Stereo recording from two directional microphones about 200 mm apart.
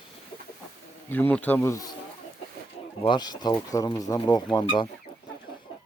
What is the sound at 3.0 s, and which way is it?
Speech, 20° left (ahead or behind).